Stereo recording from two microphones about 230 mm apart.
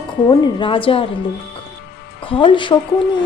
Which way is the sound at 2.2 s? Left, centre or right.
Left.